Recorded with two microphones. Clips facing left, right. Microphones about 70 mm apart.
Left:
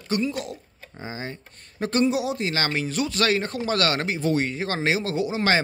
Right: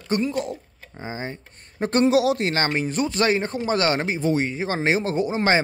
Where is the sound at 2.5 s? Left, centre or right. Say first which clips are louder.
Right 3 dB; right.